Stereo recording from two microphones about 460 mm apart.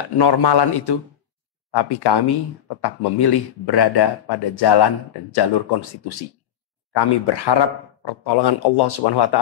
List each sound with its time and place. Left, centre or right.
0.2 s a man's voice: left